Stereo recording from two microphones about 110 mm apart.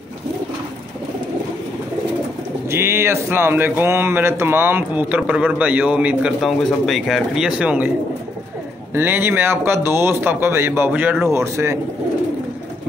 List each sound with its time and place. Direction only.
2.7 s speech: 25° right (ahead or behind)
6.4 s speech: centre (ahead or behind)
8.9 s speech: 20° right (ahead or behind)